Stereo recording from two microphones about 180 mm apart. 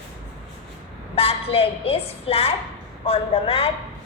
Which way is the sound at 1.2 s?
30° left (ahead or behind).